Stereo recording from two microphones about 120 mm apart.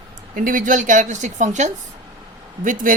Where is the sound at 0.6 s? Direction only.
90° right.